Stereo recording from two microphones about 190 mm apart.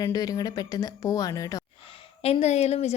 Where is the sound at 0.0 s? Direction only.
20° left (ahead or behind).